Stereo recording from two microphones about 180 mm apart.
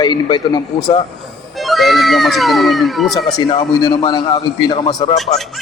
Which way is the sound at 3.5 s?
30° left (ahead or behind).